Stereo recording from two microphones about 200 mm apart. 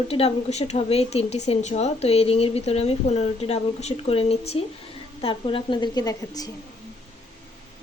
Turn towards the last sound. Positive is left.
turn(degrees=15)  # may be behind; listen again after turning